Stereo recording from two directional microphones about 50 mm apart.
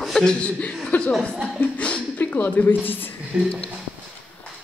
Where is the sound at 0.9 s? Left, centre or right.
Left.